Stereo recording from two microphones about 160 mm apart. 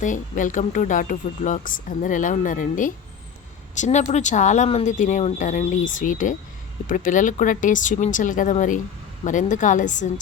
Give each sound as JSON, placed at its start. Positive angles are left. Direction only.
{"t": 0.0, "sound": "speech", "side_deg": 55}